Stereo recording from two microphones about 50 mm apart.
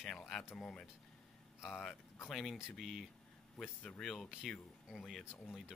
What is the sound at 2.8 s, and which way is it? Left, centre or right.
Speech, centre.